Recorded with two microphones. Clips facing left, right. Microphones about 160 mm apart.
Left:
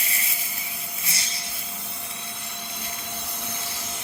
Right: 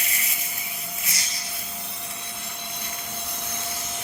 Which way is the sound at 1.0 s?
30° left (ahead or behind).